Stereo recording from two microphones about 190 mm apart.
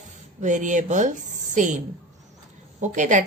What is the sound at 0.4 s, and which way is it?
A woman's voice, 40° right (ahead or behind).